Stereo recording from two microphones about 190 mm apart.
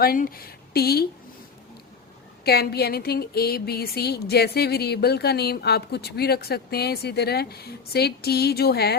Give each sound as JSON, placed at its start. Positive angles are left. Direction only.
{"t": 0.0, "sound": "speech", "side_deg": 50}
{"t": 2.4, "sound": "speech", "side_deg": 55}